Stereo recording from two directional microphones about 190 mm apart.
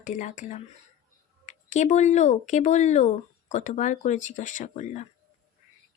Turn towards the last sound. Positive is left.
turn(degrees=40)  # may be behind; listen again after turning